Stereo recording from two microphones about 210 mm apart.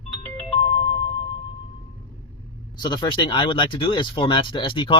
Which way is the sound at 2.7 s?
20° left (ahead or behind).